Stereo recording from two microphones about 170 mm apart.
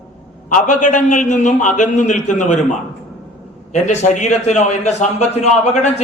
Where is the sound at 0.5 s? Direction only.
45° left (ahead or behind).